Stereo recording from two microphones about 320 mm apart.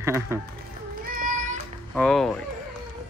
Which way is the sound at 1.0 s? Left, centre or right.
Right.